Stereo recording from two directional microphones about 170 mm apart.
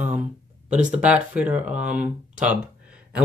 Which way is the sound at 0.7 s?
45° right (ahead or behind).